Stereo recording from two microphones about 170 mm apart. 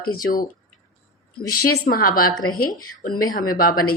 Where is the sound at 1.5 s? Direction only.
60° left (ahead or behind).